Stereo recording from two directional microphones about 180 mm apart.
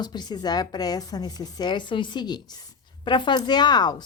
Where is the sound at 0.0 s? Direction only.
25° left (ahead or behind).